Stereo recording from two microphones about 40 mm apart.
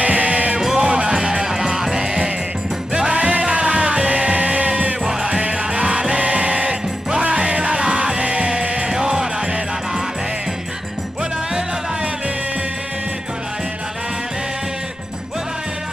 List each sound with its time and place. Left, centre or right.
0.0 s music: right
1.1 s music: centre
2.9 s music: right
5.0 s music: centre
8.8 s music: centre